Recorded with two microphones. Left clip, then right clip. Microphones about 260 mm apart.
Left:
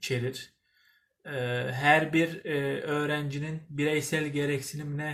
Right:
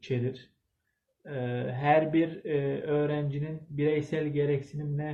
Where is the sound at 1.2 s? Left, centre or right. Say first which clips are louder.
Left 3 dB; centre.